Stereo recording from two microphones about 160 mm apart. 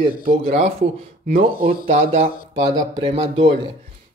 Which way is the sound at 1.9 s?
45° right (ahead or behind).